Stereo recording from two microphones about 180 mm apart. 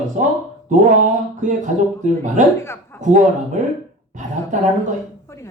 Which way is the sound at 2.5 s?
15° left (ahead or behind).